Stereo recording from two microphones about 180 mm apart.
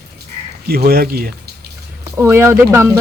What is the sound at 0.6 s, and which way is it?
Speech, 60° right (ahead or behind).